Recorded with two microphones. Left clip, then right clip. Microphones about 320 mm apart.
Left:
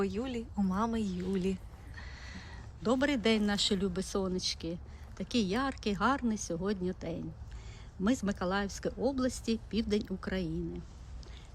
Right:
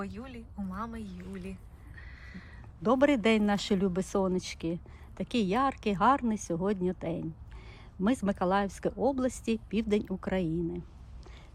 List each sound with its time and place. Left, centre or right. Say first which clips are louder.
0.0 s a woman's voice: left 7 dB; centre
2.0 s a sound: left 2 dB; centre
2.8 s a man's voice: right 5 dB; right